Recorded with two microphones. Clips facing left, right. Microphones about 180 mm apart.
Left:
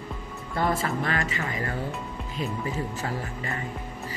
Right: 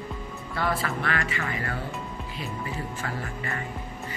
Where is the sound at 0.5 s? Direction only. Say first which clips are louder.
Left 2 dB; 45° left (ahead or behind).